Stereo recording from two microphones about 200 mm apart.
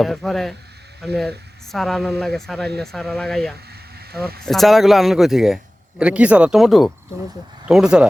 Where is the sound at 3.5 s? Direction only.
55° right (ahead or behind).